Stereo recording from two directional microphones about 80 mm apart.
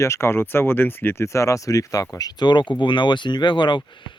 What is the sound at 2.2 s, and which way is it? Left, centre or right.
Speech, left.